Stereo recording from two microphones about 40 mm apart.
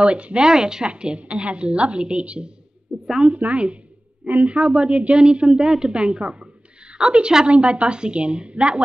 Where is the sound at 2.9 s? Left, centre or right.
Centre.